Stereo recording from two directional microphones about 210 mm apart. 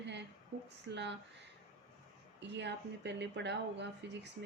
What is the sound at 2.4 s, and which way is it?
Speech, 55° right (ahead or behind).